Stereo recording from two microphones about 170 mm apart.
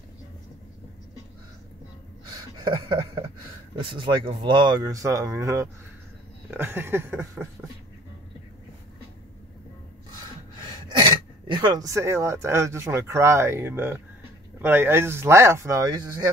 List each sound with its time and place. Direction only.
3.8 s speech: 30° right (ahead or behind); by 7.4 s 10° right (ahead or behind)
10.9 s speech: 30° right (ahead or behind)